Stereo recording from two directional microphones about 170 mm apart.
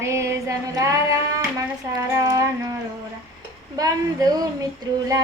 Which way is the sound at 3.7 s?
20° right (ahead or behind).